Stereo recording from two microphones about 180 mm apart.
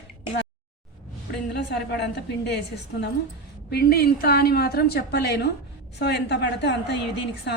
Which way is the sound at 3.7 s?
60° left (ahead or behind).